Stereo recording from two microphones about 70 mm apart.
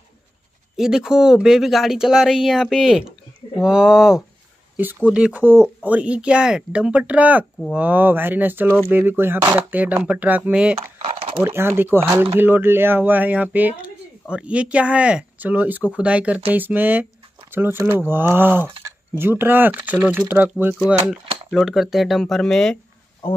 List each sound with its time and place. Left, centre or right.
0.7 s speech: centre
11.4 s speech: right
21.5 s speech: centre
22.2 s speech: centre